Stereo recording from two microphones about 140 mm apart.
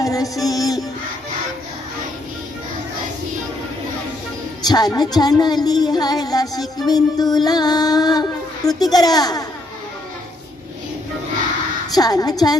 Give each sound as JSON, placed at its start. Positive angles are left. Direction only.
{"t": 0.0, "sound": "music", "side_deg": 25}
{"t": 4.6, "sound": "speech", "side_deg": 30}
{"t": 11.9, "sound": "speech", "side_deg": 25}